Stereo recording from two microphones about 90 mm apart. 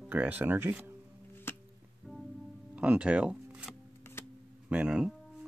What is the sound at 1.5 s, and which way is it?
Music, 25° left (ahead or behind).